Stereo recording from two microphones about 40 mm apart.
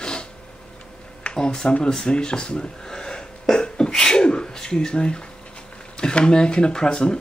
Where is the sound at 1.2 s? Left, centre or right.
Left.